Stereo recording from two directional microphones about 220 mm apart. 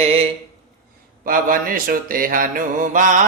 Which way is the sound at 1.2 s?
40° right (ahead or behind).